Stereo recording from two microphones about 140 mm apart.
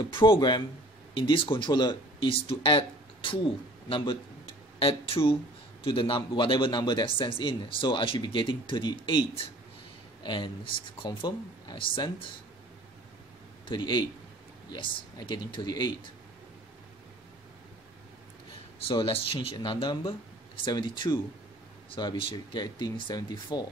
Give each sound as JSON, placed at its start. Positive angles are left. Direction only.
{"t": 0.1, "sound": "speech", "side_deg": 35}
{"t": 13.7, "sound": "speech", "side_deg": 35}
{"t": 18.9, "sound": "speech", "side_deg": 40}